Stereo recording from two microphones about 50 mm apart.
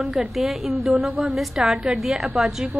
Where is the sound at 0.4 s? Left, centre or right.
Centre.